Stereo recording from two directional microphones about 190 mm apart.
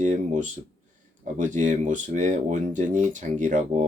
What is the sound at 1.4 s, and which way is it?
Speech, 40° right (ahead or behind).